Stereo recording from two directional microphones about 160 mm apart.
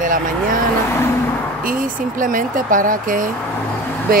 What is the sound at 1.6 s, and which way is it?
Speech, 60° right (ahead or behind).